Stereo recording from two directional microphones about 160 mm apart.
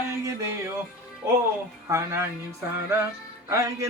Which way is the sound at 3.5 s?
20° right (ahead or behind).